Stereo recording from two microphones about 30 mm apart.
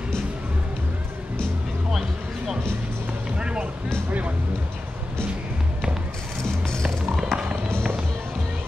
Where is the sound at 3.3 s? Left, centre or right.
Right.